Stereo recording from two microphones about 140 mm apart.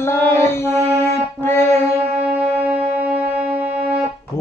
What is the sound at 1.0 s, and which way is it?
Music, 15° left (ahead or behind).